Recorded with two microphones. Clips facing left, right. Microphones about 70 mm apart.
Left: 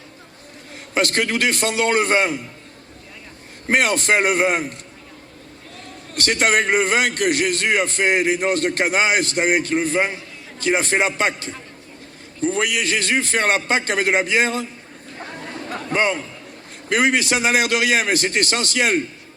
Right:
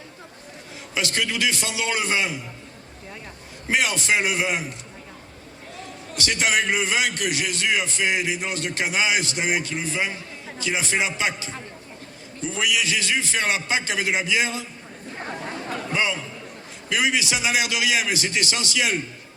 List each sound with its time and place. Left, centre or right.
0.9 s a man's voice: left
3.7 s a man's voice: left
5.7 s a man's voice: left
15.9 s a man's voice: left